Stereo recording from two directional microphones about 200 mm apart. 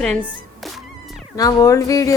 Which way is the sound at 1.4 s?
15° left (ahead or behind).